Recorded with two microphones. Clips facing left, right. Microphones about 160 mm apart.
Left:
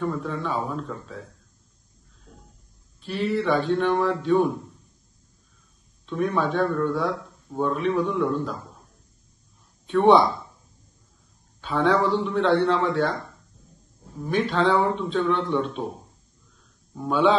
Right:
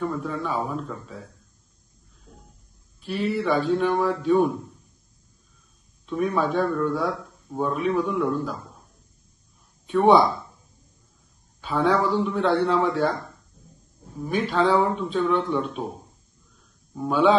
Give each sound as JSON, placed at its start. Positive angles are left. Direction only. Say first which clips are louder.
{"t": 0.0, "sound": "a man's voice", "louder": "even", "side_deg": 0}
{"t": 3.3, "sound": "a man's voice", "louder": "even", "side_deg": 0}
{"t": 6.0, "sound": "a man's voice", "louder": "even", "side_deg": 0}
{"t": 9.8, "sound": "speech", "louder": "even", "side_deg": 0}
{"t": 11.6, "sound": "a man's voice", "louder": "even", "side_deg": 0}
{"t": 14.1, "sound": "a man's voice", "louder": "even", "side_deg": -5}
{"t": 16.9, "sound": "a man's voice", "louder": "right 1 dB", "side_deg": -5}